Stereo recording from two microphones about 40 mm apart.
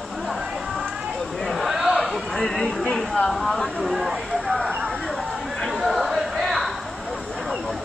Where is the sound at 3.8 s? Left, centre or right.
Centre.